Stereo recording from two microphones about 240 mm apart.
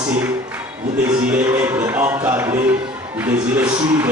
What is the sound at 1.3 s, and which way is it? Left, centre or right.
Speech, centre.